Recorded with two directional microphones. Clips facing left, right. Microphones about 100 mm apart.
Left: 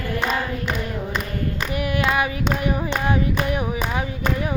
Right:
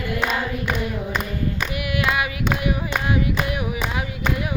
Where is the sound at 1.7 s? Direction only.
35° left (ahead or behind).